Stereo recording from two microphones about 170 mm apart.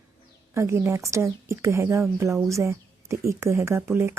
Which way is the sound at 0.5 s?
15° right (ahead or behind).